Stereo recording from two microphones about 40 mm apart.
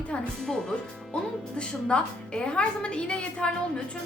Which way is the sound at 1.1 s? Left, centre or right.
Left.